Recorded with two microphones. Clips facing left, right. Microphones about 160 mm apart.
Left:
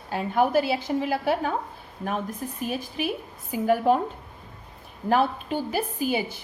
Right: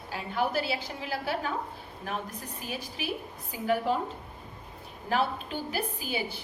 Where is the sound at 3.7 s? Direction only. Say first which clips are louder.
Left 6 dB; 50° left (ahead or behind).